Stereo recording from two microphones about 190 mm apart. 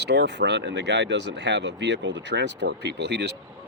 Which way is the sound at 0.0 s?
60° right (ahead or behind).